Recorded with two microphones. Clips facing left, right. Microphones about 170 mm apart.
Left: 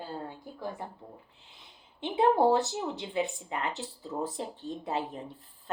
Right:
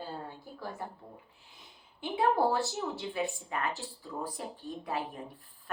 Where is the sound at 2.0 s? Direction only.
20° left (ahead or behind).